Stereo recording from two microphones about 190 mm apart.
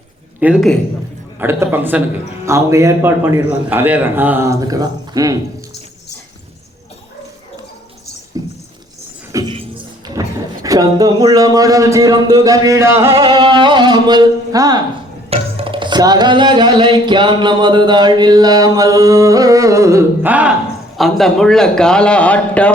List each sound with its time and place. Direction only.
0.3 s a man's voice: 5° right (ahead or behind)
8.4 s a sound: 20° right (ahead or behind)
10.2 s speech: 20° right (ahead or behind)
13.1 s music: 30° right (ahead or behind); by 20.5 s 10° right (ahead or behind)
21.0 s a man's voice: centre (ahead or behind)